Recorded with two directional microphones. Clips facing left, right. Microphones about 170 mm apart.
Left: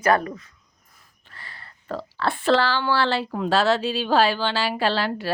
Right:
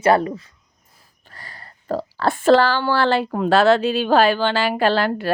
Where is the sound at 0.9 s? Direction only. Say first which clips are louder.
Right 3 dB; 40° right (ahead or behind).